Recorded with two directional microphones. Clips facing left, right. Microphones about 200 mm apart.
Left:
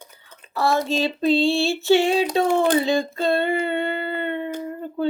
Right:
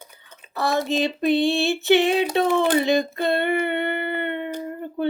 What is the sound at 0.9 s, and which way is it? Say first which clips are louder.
Female singing: even; 15° right (ahead or behind).